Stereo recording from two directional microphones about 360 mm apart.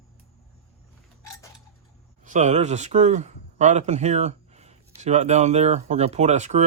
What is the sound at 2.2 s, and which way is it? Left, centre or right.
Speech, centre.